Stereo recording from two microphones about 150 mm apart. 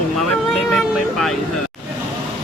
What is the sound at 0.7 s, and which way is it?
Speech, centre (ahead or behind).